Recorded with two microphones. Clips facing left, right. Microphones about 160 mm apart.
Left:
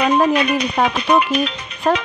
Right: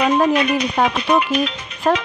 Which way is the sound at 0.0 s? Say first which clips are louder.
Even; centre (ahead or behind).